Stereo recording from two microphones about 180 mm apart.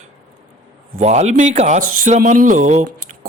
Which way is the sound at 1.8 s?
50° right (ahead or behind).